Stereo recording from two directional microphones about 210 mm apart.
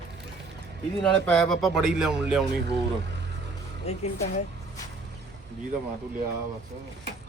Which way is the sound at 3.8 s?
30° left (ahead or behind).